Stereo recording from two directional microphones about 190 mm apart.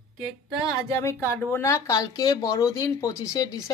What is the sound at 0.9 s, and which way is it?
Speech, 15° left (ahead or behind).